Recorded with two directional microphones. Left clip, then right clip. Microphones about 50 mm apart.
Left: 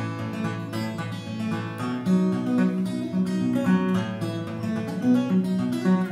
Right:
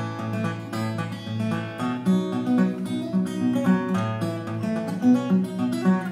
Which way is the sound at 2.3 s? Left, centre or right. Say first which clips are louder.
Right 1 dB; right.